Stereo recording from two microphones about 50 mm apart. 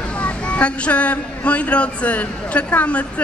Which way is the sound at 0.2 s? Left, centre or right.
Left.